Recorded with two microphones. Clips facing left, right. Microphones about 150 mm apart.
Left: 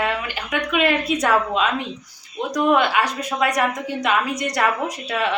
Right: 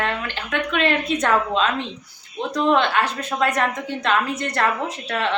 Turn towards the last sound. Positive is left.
turn(degrees=10)  # may be behind; listen again after turning